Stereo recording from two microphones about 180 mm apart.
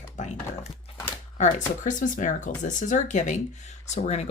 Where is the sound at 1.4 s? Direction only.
45° left (ahead or behind).